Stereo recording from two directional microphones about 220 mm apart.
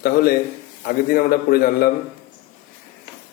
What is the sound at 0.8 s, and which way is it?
Speech, 40° left (ahead or behind).